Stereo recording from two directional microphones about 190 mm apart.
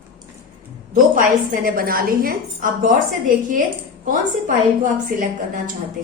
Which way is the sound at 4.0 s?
45° right (ahead or behind).